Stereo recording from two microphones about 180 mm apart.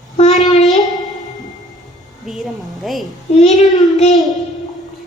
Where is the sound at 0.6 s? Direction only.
Centre (ahead or behind).